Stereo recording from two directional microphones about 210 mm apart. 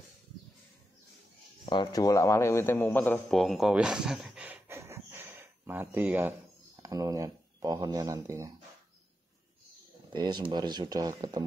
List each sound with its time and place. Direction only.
1.7 s speech: 20° left (ahead or behind); by 8.5 s 15° right (ahead or behind)
10.1 s speech: 20° right (ahead or behind)